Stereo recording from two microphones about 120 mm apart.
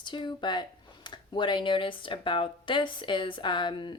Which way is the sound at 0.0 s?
40° left (ahead or behind).